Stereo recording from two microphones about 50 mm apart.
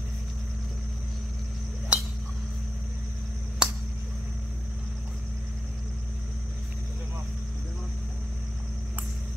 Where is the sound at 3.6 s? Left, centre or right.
Centre.